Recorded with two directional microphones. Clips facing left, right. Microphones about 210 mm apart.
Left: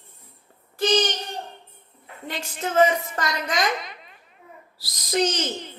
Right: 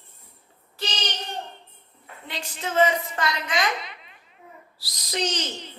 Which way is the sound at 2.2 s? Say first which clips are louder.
Left 3 dB; 45° left (ahead or behind).